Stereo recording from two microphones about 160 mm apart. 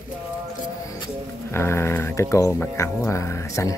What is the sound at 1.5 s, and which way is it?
Speech, 15° left (ahead or behind).